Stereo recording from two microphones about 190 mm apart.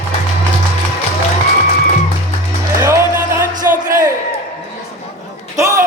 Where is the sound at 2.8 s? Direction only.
15° right (ahead or behind).